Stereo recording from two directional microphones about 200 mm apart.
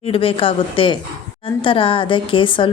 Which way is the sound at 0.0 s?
30° left (ahead or behind).